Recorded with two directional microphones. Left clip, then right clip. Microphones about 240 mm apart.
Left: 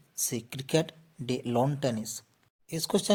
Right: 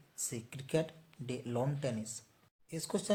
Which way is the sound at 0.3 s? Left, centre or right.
Left.